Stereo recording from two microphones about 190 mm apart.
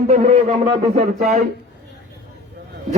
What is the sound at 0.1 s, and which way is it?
Speech, 35° right (ahead or behind).